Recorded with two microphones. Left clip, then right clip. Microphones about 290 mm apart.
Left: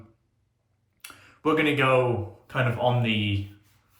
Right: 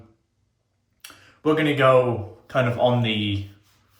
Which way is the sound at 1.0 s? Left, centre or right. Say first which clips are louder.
Right 1 dB; centre.